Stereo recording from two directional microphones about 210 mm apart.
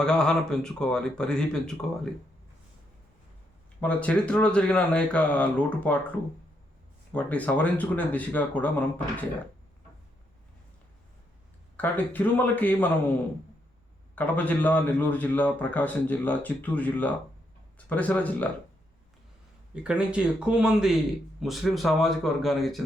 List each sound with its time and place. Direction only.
0.0 s speech: 5° left (ahead or behind)
3.8 s a man's voice: 5° left (ahead or behind)
11.8 s a man's voice: 10° left (ahead or behind)
14.2 s a man's voice: 10° left (ahead or behind)
19.7 s speech: 5° right (ahead or behind)